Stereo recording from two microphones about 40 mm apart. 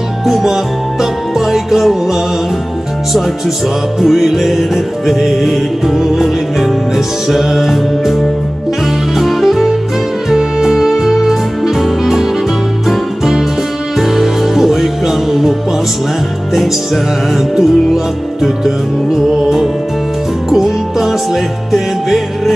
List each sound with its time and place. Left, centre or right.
0.3 s music: centre
16.5 s music: centre
20.4 s music: centre